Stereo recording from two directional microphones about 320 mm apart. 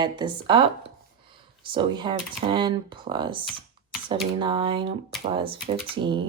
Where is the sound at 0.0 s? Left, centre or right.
Centre.